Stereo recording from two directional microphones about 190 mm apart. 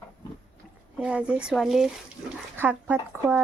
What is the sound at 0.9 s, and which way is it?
Speech, 5° right (ahead or behind).